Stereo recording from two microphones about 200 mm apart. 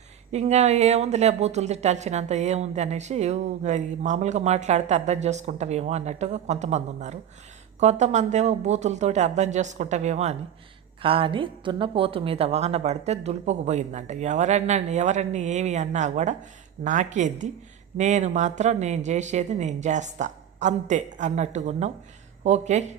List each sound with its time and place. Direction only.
0.3 s speech: 35° right (ahead or behind)